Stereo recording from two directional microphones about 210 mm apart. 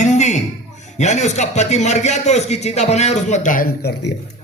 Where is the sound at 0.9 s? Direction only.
35° left (ahead or behind).